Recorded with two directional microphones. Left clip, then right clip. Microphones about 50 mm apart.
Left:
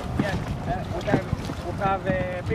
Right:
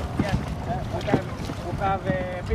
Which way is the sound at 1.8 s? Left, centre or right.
Left.